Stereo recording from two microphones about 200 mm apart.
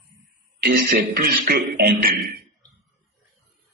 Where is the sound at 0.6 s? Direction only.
50° right (ahead or behind).